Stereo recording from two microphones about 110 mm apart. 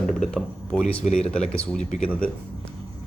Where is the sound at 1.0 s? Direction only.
90° left.